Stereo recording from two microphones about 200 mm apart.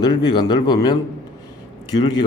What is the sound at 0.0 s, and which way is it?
Speech, 20° left (ahead or behind).